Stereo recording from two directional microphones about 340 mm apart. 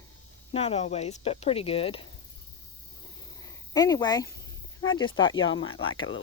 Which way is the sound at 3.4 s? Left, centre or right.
Centre.